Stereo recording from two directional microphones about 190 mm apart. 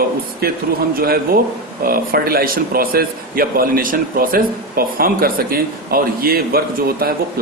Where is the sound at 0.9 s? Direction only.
50° right (ahead or behind).